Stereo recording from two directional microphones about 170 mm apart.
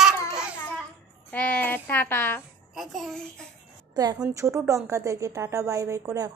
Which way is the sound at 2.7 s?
Centre (ahead or behind).